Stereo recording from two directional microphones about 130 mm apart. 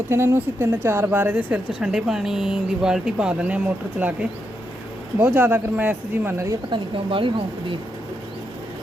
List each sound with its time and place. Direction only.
0.1 s speech: 15° right (ahead or behind)
5.2 s speech: 15° right (ahead or behind)
6.7 s speech: 40° right (ahead or behind)